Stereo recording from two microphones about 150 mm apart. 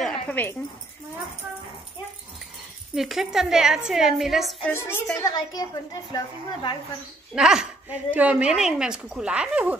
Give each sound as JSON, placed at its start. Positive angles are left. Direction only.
{"t": 0.0, "sound": "a sound", "side_deg": 10}
{"t": 2.9, "sound": "speech", "side_deg": 0}
{"t": 4.6, "sound": "a woman's voice", "side_deg": 15}
{"t": 7.3, "sound": "speech", "side_deg": -5}